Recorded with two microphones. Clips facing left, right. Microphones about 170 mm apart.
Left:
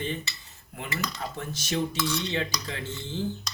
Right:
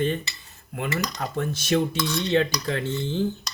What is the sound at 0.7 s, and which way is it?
Cutlery, 65° right (ahead or behind).